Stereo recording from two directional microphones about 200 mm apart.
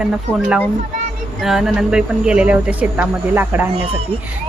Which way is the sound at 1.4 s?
Centre (ahead or behind).